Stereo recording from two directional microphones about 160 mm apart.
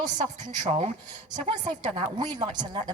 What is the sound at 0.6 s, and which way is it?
Speech, 45° right (ahead or behind).